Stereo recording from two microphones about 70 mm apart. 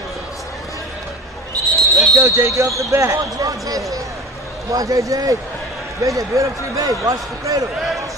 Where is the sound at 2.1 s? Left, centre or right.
Right.